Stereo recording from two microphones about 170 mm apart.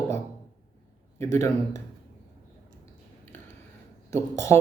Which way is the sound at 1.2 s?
15° left (ahead or behind).